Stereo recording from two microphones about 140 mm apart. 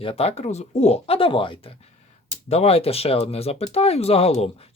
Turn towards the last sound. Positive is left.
turn(degrees=45)  # may be behind; listen again after turning